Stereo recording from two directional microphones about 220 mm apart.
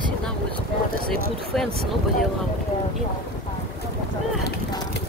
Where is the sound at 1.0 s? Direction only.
Centre (ahead or behind).